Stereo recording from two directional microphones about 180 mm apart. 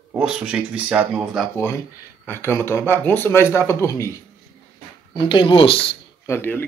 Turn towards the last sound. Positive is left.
turn(degrees=10)  # may be behind; listen again after turning